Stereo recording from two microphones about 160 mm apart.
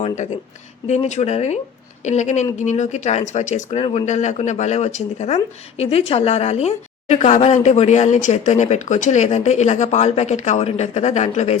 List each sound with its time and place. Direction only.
0.9 s speech: 45° left (ahead or behind)